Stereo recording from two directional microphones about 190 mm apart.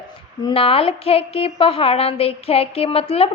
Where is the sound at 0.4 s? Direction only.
30° left (ahead or behind).